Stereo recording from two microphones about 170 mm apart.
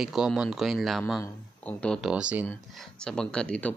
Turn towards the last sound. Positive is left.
turn(degrees=5)  # may be behind; listen again after turning